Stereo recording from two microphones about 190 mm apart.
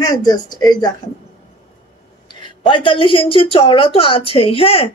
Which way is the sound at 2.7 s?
25° left (ahead or behind).